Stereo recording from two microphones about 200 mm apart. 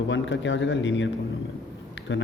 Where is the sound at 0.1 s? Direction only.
65° left (ahead or behind).